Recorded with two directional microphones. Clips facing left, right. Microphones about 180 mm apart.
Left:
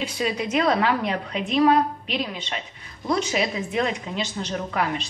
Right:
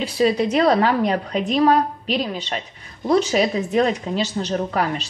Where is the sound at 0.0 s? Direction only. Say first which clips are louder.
Right 8 dB; 35° right (ahead or behind).